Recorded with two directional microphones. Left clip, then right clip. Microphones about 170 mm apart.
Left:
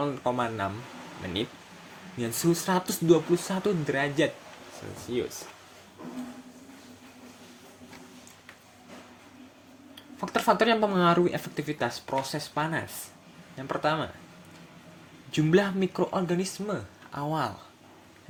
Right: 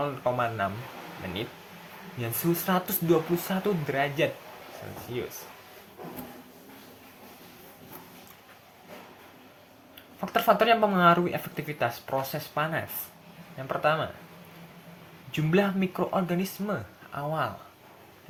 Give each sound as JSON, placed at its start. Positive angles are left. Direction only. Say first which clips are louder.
{"t": 0.0, "sound": "speech", "louder": "right 1 dB", "side_deg": 40}
{"t": 2.2, "sound": "speech", "louder": "left 2 dB", "side_deg": 35}
{"t": 10.2, "sound": "speech", "louder": "right 1 dB", "side_deg": 35}
{"t": 15.4, "sound": "speech", "louder": "left 2 dB", "side_deg": 35}